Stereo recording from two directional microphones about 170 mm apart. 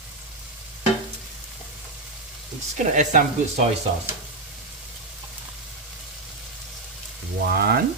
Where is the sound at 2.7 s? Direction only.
45° right (ahead or behind).